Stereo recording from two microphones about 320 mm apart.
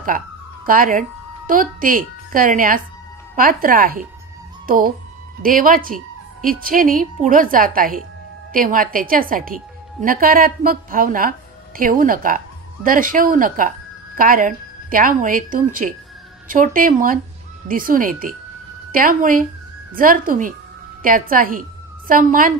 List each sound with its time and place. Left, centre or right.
0.7 s a woman's voice: right